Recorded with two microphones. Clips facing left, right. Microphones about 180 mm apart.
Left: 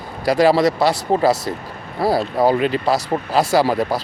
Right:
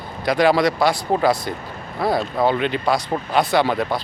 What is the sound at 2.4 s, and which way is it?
Speech, 35° left (ahead or behind).